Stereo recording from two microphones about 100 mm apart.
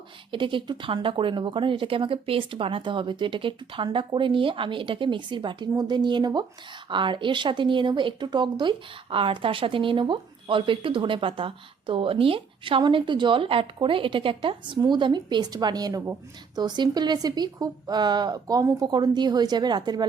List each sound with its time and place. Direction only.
0.3 s speech: 55° right (ahead or behind)
12.8 s speech: 50° right (ahead or behind)
14.8 s speech: 50° right (ahead or behind); by 16.1 s 35° right (ahead or behind)
16.6 s speech: 45° right (ahead or behind)